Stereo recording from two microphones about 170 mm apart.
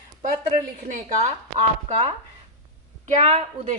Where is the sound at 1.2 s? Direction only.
40° right (ahead or behind).